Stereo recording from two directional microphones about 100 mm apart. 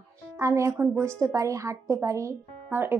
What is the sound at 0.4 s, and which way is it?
A woman's voice, 30° right (ahead or behind).